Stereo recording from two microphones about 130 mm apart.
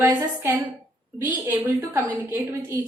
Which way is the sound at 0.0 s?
25° right (ahead or behind).